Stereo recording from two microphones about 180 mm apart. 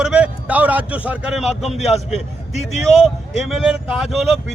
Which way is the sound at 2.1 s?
40° left (ahead or behind).